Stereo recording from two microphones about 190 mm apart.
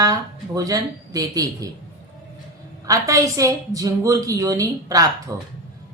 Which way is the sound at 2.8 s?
15° right (ahead or behind).